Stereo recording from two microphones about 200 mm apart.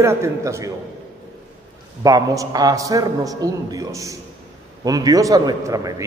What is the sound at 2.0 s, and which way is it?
A man's voice, 15° right (ahead or behind).